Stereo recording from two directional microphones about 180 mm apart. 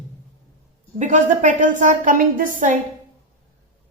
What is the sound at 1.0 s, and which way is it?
A woman's voice, 45° right (ahead or behind).